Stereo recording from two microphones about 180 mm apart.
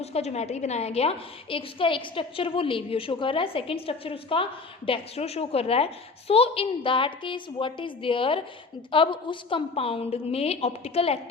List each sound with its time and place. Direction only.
0.0 s a woman's voice: 35° left (ahead or behind)